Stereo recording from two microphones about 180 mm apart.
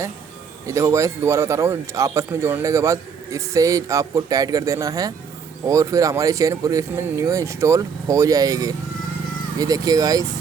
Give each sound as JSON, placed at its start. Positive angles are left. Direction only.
{"t": 0.7, "sound": "a man's voice", "side_deg": -15}